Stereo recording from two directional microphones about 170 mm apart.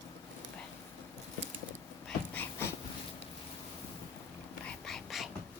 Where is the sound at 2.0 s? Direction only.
10° left (ahead or behind).